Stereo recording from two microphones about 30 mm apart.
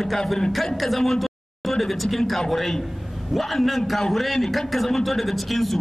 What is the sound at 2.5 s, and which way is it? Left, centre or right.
A man's voice, centre.